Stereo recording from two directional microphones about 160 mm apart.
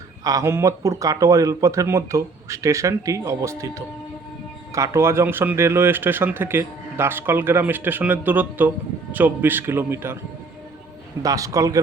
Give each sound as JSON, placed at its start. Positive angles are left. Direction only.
{"t": 0.3, "sound": "speech", "side_deg": -20}
{"t": 11.2, "sound": "speech", "side_deg": -20}